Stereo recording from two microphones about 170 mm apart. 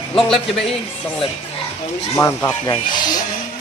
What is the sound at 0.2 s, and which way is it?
Speech, centre (ahead or behind).